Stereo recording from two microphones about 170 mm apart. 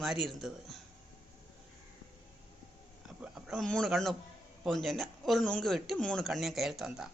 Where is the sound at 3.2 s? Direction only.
Centre (ahead or behind).